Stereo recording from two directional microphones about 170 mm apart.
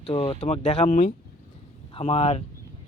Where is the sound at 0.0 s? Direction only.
30° left (ahead or behind).